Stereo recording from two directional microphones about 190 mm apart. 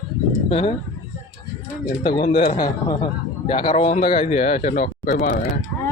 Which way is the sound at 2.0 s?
25° left (ahead or behind).